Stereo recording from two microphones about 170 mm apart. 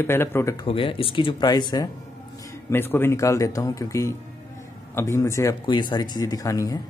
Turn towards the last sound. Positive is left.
turn(degrees=20)  # may be behind; listen again after turning